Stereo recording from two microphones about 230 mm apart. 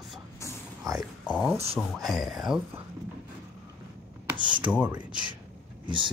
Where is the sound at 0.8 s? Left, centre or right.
Centre.